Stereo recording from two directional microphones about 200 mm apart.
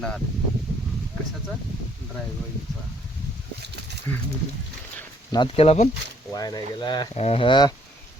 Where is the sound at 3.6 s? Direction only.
55° right (ahead or behind).